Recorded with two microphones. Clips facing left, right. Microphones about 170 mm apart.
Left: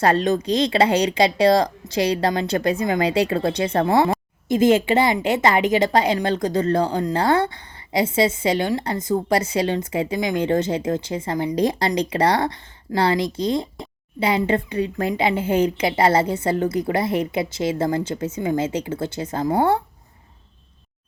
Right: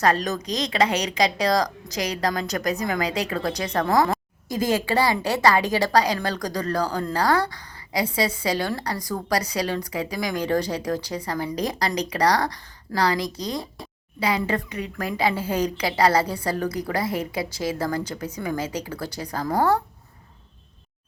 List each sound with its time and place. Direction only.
0.0 s a woman's voice: 30° left (ahead or behind)